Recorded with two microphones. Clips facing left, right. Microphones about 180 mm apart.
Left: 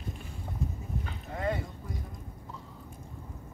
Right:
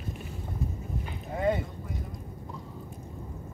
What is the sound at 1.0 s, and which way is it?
Boat, 20° right (ahead or behind).